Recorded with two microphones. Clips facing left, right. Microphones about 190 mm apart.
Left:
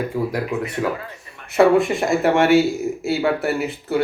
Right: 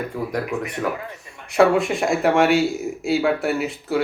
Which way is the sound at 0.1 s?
10° left (ahead or behind).